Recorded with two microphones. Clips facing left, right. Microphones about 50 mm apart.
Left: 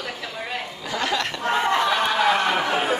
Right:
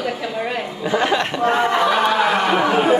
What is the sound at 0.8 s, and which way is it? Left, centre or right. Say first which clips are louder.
Speech: right 7 dB; right.